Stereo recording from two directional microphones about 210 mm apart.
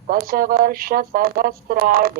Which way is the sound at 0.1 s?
45° right (ahead or behind).